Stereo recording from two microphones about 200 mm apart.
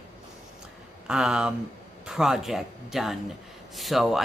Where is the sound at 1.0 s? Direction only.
5° right (ahead or behind).